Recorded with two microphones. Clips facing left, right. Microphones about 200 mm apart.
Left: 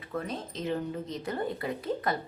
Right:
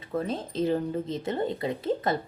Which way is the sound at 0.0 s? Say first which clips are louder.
Right 5 dB; 30° right (ahead or behind).